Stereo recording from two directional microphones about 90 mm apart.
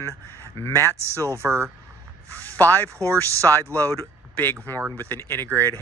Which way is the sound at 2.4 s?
20° left (ahead or behind).